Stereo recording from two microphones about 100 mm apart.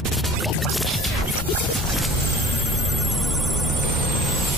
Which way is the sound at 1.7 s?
Centre (ahead or behind).